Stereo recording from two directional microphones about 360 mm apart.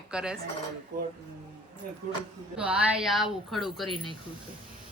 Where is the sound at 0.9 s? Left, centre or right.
Right.